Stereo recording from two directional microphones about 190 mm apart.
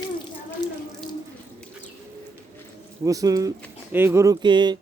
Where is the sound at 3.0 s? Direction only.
20° right (ahead or behind).